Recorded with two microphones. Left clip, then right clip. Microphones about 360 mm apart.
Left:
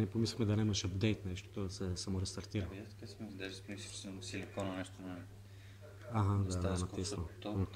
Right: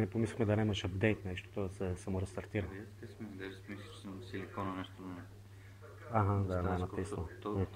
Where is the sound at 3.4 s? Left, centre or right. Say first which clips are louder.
Left 1 dB; left.